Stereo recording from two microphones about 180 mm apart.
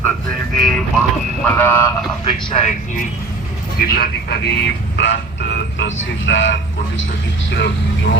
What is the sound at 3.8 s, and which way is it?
Speech, 55° left (ahead or behind).